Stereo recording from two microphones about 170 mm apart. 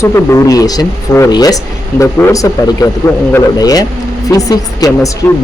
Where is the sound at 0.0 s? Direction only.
15° left (ahead or behind).